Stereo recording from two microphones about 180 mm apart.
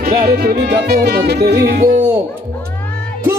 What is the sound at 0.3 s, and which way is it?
Music, 60° right (ahead or behind).